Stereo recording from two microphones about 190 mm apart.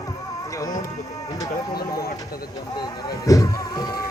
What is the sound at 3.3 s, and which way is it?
Music, 15° left (ahead or behind).